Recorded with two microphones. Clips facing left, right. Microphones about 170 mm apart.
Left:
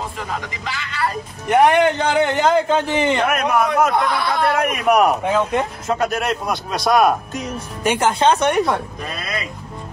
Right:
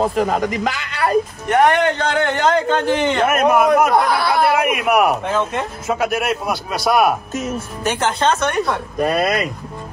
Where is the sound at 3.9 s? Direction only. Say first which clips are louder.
Right 3 dB; 35° right (ahead or behind).